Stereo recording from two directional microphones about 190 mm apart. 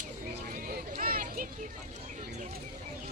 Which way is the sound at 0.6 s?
50° right (ahead or behind).